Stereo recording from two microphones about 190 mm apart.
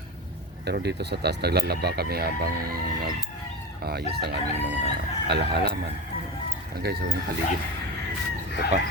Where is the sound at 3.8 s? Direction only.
55° right (ahead or behind).